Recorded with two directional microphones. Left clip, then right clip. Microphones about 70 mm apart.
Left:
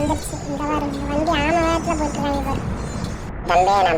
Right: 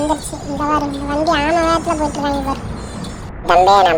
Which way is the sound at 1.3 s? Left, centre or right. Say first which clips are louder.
Right 4 dB; right.